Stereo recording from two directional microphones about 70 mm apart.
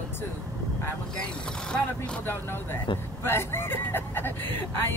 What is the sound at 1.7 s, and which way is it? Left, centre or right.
Speech, centre.